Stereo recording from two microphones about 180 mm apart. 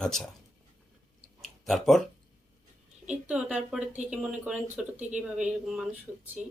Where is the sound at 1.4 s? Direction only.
Centre (ahead or behind).